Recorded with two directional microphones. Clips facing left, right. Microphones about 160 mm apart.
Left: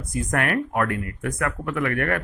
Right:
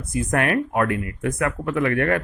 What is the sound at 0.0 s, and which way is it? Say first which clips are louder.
Speech: right 3 dB; 25° right (ahead or behind).